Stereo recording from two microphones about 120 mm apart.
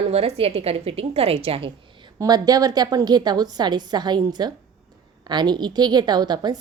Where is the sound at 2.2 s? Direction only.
35° right (ahead or behind).